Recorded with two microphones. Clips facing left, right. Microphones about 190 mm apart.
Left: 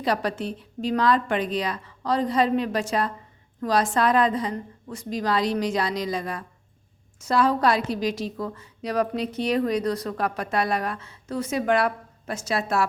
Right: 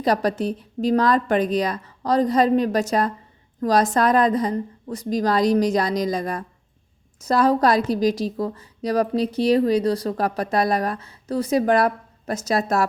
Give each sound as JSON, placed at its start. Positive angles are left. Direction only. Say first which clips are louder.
{"t": 0.0, "sound": "a woman's voice", "louder": "right 5 dB", "side_deg": -40}